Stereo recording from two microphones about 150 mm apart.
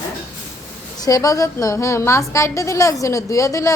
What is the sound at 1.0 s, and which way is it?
A woman's voice, 20° left (ahead or behind).